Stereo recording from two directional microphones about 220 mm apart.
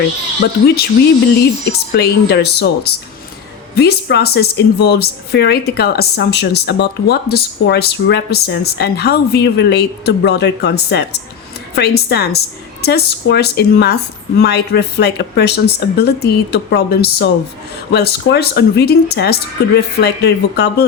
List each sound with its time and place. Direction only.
0.4 s a woman's voice: 45° left (ahead or behind)